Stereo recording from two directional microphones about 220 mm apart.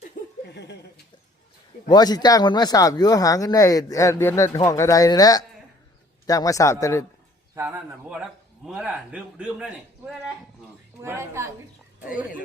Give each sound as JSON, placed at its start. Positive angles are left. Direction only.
{"t": 0.5, "sound": "a sound", "side_deg": 50}
{"t": 1.9, "sound": "speech", "side_deg": 20}
{"t": 7.5, "sound": "a woman's voice", "side_deg": -10}